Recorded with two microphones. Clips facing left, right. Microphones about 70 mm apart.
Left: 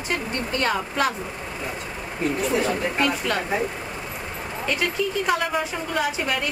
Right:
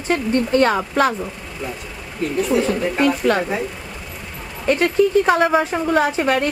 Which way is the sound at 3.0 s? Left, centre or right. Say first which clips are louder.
Right 9 dB; right.